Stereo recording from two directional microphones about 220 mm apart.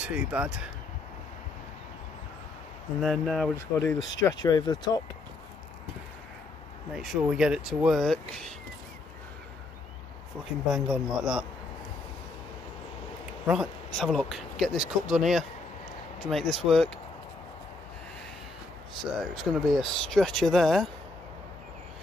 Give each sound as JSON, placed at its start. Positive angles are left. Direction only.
{"t": 0.0, "sound": "speech", "side_deg": -5}
{"t": 3.0, "sound": "speech", "side_deg": 0}
{"t": 3.5, "sound": "speech", "side_deg": 15}
{"t": 6.9, "sound": "speech", "side_deg": 0}
{"t": 10.7, "sound": "speech", "side_deg": -5}
{"t": 13.5, "sound": "speech", "side_deg": 0}
{"t": 19.3, "sound": "speech", "side_deg": 0}